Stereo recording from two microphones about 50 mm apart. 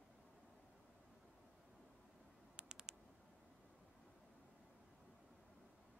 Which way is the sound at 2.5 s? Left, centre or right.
Centre.